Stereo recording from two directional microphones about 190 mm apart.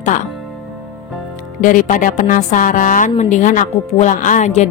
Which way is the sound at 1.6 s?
45° left (ahead or behind).